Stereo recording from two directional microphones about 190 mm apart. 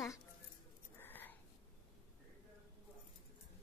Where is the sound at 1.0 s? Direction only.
10° left (ahead or behind).